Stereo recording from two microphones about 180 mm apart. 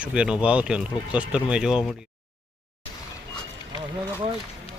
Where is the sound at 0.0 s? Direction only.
5° right (ahead or behind).